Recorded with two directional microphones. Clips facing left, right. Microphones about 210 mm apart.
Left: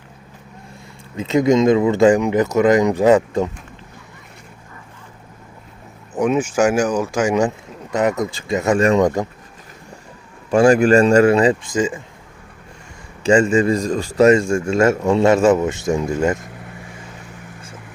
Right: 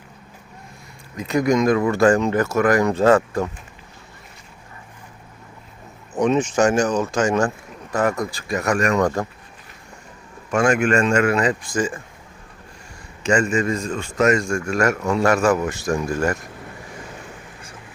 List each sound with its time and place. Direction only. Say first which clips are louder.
1.1 s speech: left 4 dB; 25° left (ahead or behind)
6.1 s speech: left 1 dB; 10° left (ahead or behind)
10.5 s speech: left 6 dB; 35° left (ahead or behind)
13.2 s speech: left 5 dB; 30° left (ahead or behind)